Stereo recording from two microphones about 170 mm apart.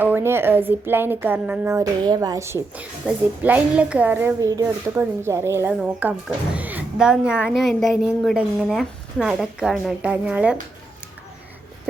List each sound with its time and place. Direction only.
0.0 s a woman's voice: 10° right (ahead or behind)